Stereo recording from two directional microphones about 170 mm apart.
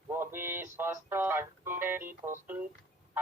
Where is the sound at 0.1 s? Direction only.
15° right (ahead or behind).